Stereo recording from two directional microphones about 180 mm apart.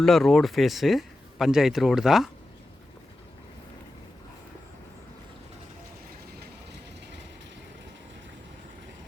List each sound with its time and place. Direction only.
0.0 s speech: centre (ahead or behind)